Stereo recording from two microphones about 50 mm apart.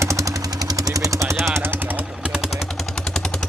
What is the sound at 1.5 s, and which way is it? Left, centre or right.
Jackhammer, right.